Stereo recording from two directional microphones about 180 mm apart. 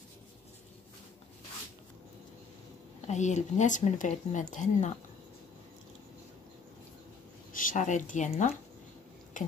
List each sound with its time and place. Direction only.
3.1 s speech: 40° left (ahead or behind)
7.5 s speech: 45° left (ahead or behind)